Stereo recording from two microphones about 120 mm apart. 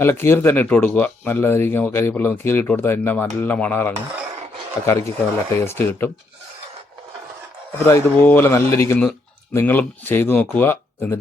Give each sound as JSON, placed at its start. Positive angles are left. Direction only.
{"t": 0.0, "sound": "speech", "side_deg": 20}
{"t": 7.9, "sound": "speech", "side_deg": 15}